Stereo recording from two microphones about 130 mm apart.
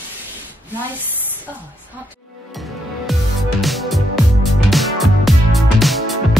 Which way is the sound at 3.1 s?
Centre (ahead or behind).